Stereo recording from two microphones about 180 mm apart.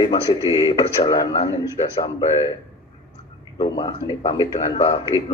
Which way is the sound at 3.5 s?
25° left (ahead or behind).